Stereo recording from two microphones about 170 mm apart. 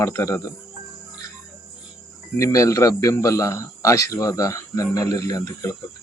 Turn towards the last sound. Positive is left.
turn(degrees=20)  # may be behind; listen again after turning